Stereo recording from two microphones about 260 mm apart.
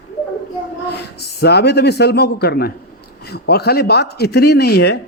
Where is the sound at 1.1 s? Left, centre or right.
Left.